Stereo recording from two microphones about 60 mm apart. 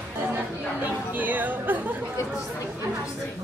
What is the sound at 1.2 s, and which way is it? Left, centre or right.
Speech, right.